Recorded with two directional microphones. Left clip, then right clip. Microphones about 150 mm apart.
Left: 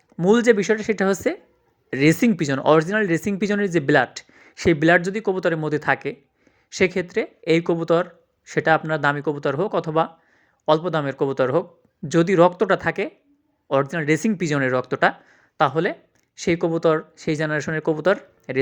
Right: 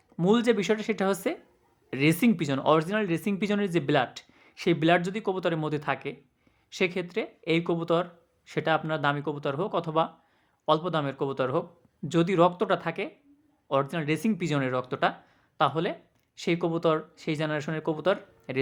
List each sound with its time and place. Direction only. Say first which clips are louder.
0.2 s speech: left 7 dB; 20° left (ahead or behind)